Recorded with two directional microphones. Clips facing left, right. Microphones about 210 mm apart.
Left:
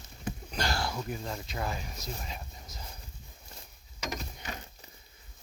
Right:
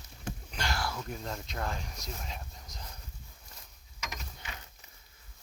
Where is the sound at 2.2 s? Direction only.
5° left (ahead or behind).